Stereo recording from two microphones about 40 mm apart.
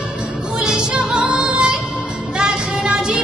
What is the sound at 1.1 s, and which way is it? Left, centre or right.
Music, right.